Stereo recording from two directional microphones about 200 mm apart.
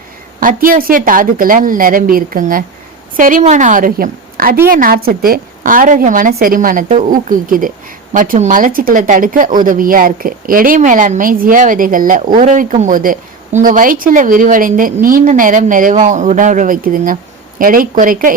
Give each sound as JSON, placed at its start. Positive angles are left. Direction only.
{"t": 0.3, "sound": "a woman's voice", "side_deg": -45}